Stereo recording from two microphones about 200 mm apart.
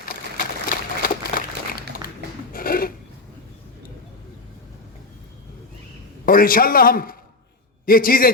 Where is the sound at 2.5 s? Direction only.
45° left (ahead or behind).